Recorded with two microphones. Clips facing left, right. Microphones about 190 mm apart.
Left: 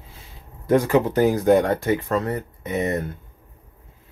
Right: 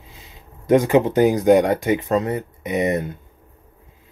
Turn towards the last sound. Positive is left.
turn(degrees=-15)  # may be behind; listen again after turning